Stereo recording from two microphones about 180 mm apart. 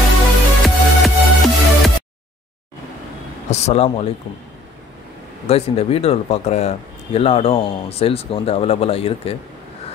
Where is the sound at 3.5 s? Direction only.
35° left (ahead or behind).